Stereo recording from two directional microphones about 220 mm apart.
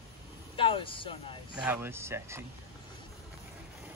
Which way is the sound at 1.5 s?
5° right (ahead or behind).